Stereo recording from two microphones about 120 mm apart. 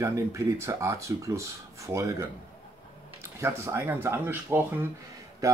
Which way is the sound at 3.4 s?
20° right (ahead or behind).